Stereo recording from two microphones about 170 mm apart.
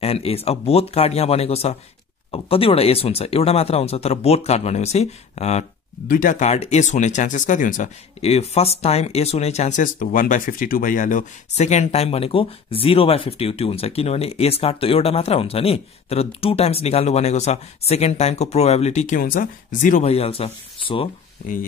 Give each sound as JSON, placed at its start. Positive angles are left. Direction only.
{"t": 0.0, "sound": "speech", "side_deg": 35}
{"t": 6.0, "sound": "speech", "side_deg": 50}
{"t": 21.4, "sound": "speech", "side_deg": 50}